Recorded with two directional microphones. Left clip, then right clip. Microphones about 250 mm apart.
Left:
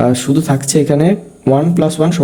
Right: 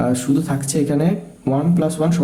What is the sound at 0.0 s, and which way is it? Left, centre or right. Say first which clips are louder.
Speech: left 6 dB; left.